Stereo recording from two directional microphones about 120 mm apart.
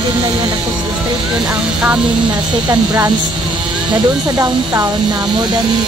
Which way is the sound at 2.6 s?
30° right (ahead or behind).